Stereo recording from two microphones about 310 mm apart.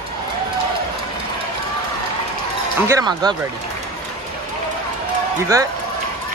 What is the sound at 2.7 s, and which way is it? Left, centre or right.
Speech, centre.